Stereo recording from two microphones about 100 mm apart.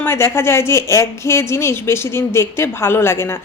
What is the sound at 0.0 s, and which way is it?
A woman's voice, 25° left (ahead or behind).